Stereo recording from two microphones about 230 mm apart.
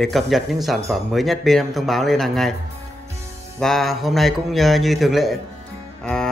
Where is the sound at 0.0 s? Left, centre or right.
Centre.